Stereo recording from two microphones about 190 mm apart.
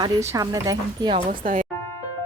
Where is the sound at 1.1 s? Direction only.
40° right (ahead or behind).